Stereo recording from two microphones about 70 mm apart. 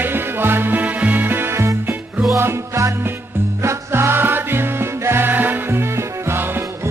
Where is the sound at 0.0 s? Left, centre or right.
Right.